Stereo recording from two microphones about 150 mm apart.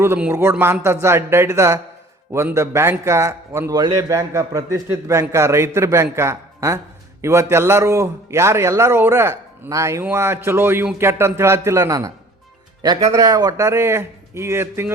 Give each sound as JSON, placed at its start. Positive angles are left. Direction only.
{"t": 0.0, "sound": "a man's voice", "side_deg": -15}